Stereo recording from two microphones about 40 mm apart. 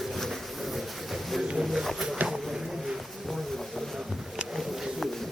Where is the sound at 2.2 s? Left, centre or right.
Centre.